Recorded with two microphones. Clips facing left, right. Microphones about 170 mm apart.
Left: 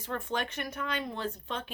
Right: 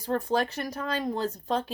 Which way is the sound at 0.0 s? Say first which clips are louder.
Right 7 dB; 35° right (ahead or behind).